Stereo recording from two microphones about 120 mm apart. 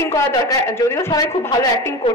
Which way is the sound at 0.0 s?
25° left (ahead or behind).